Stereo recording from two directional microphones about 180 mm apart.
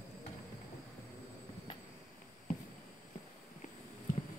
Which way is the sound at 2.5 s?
50° left (ahead or behind).